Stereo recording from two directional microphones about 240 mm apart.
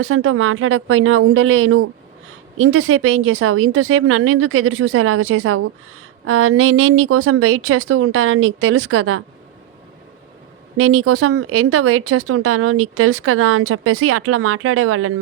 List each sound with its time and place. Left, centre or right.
0.0 s speech: right
10.8 s speech: right